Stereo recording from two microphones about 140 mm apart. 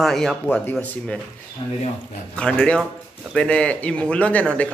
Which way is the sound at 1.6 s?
40° left (ahead or behind).